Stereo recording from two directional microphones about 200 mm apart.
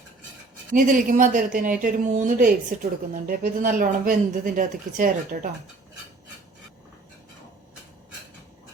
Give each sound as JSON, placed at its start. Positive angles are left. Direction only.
{"t": 0.7, "sound": "a woman's voice", "side_deg": -40}